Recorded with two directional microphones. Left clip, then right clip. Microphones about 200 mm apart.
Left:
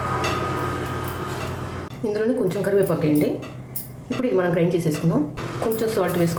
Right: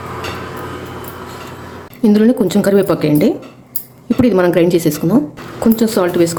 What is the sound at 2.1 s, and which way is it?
A woman's voice, 55° right (ahead or behind).